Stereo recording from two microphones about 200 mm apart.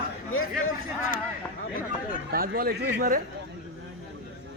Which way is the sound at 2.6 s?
50° right (ahead or behind).